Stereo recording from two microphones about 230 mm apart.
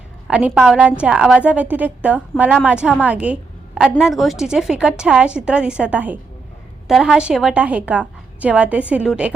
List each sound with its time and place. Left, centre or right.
0.3 s a woman's voice: centre